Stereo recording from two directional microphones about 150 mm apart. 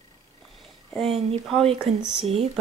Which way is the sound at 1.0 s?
40° right (ahead or behind).